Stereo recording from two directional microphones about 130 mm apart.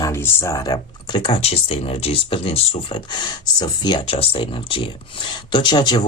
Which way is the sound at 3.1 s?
35° left (ahead or behind).